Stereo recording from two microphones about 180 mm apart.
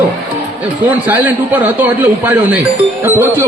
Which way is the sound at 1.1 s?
10° right (ahead or behind).